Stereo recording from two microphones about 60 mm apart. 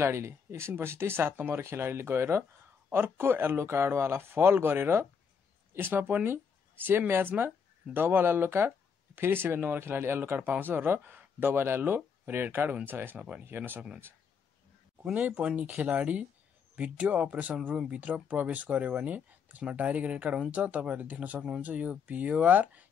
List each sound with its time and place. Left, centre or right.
0.0 s speech: right
15.1 s speech: right